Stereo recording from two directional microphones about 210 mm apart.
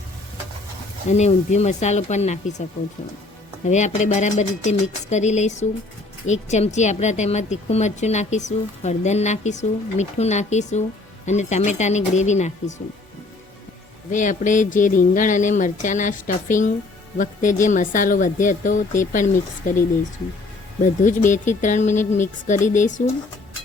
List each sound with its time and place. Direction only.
1.1 s speech: 35° left (ahead or behind)
3.6 s speech: 35° left (ahead or behind)
14.1 s speech: 35° left (ahead or behind)
20.8 s speech: 35° left (ahead or behind)